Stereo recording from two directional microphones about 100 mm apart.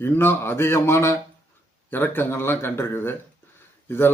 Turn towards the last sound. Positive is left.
turn(degrees=20)  # may be behind; listen again after turning